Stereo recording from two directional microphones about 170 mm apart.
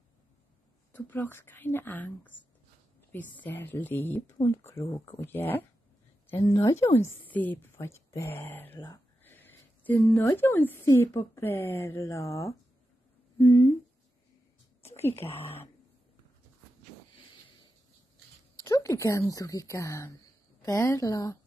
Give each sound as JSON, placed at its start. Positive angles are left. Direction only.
{"t": 0.9, "sound": "a woman's voice", "side_deg": 10}
{"t": 3.4, "sound": "a woman's voice", "side_deg": 10}
{"t": 13.4, "sound": "humming", "side_deg": 25}
{"t": 15.0, "sound": "a woman's voice", "side_deg": 15}
{"t": 18.6, "sound": "speech", "side_deg": 15}